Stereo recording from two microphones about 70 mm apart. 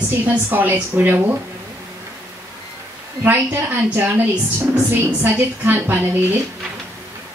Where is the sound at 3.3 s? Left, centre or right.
Right.